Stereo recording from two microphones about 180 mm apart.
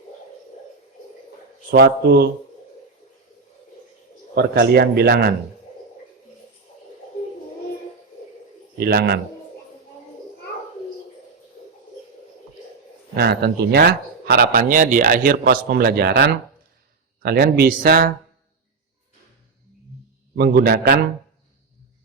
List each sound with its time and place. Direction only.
1.7 s speech: 60° right (ahead or behind)
4.4 s speech: 65° right (ahead or behind)
8.8 s speech: 60° right (ahead or behind)
13.1 s speech: 60° right (ahead or behind)
20.3 s speech: 60° right (ahead or behind)